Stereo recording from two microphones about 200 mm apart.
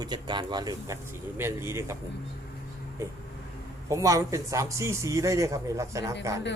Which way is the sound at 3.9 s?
15° right (ahead or behind).